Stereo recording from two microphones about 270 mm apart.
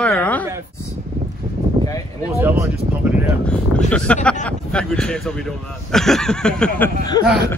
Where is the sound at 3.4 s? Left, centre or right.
Centre.